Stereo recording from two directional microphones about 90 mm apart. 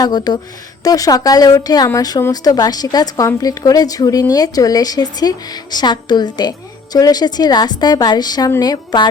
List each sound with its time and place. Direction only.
0.0 s speech: 50° left (ahead or behind)